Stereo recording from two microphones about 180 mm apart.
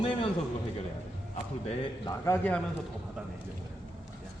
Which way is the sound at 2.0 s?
15° left (ahead or behind).